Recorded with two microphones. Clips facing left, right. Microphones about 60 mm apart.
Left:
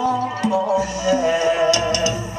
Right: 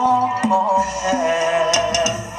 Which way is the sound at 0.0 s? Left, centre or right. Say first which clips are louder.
Right 4 dB; right.